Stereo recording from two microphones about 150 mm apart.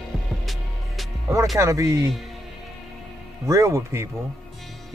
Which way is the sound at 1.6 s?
20° right (ahead or behind).